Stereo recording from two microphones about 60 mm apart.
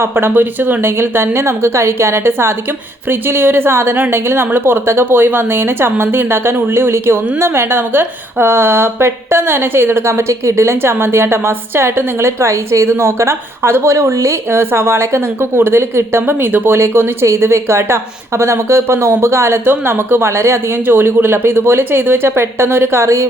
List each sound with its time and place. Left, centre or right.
0.0 s a woman's voice: right
14.5 s a woman's voice: right
16.6 s a woman's voice: right
17.2 s a woman's voice: right